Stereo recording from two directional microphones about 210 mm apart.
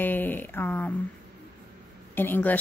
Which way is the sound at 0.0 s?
10° left (ahead or behind).